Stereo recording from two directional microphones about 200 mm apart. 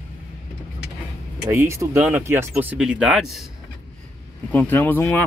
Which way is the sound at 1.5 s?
15° right (ahead or behind).